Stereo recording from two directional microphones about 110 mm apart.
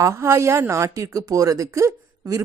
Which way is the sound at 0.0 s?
25° right (ahead or behind).